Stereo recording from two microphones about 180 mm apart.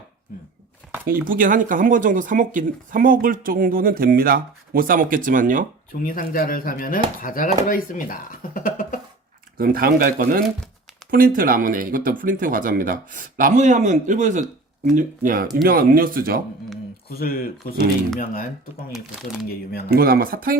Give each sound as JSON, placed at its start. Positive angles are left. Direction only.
{"t": 1.0, "sound": "speech", "side_deg": -50}
{"t": 5.9, "sound": "speech", "side_deg": 55}
{"t": 8.5, "sound": "cough", "side_deg": 50}
{"t": 9.6, "sound": "speech", "side_deg": -55}
{"t": 17.1, "sound": "speech", "side_deg": 55}
{"t": 18.9, "sound": "speech", "side_deg": 0}
{"t": 19.9, "sound": "speech", "side_deg": -55}